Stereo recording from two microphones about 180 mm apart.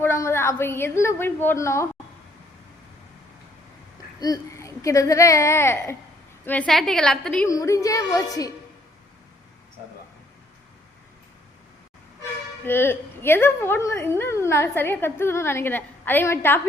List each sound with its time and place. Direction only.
0.0 s a woman's voice: 15° left (ahead or behind)
4.2 s a woman's voice: 20° left (ahead or behind)
7.4 s a woman's voice: 20° left (ahead or behind)
12.6 s a woman's voice: 10° left (ahead or behind)